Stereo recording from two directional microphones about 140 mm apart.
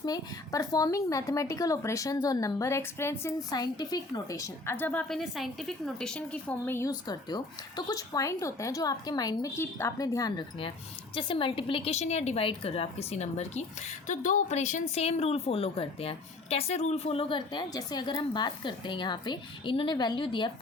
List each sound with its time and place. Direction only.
0.0 s speech: 25° left (ahead or behind)
3.5 s a woman's voice: 30° left (ahead or behind)
7.1 s a woman's voice: 30° left (ahead or behind)